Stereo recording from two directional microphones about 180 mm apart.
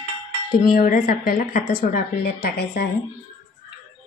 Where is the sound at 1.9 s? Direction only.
65° left (ahead or behind).